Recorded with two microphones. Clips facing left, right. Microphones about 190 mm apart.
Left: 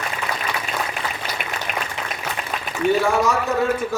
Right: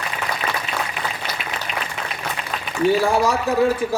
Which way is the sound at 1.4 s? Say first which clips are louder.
Even; 55° left (ahead or behind).